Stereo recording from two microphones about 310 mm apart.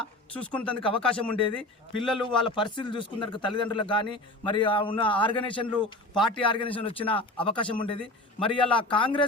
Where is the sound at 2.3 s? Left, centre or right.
Centre.